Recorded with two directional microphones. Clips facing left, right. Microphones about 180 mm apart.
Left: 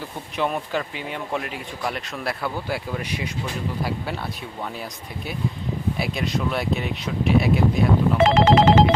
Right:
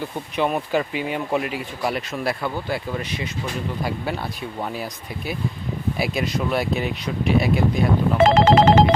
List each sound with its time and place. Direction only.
0.3 s speech: 5° right (ahead or behind)
2.6 s speech: 10° left (ahead or behind)
4.8 s speech: 5° right (ahead or behind)
8.2 s telephone: 40° right (ahead or behind)